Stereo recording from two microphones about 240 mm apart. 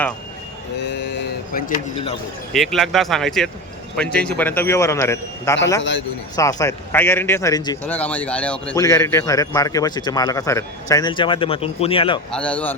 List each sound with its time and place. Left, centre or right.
0.8 s a sound: left
2.5 s a man's voice: centre; by 12.2 s left
12.3 s speech: centre